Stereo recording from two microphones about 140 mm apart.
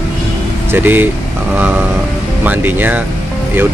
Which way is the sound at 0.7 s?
15° right (ahead or behind).